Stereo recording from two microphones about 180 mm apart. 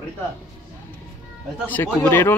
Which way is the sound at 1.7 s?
10° left (ahead or behind).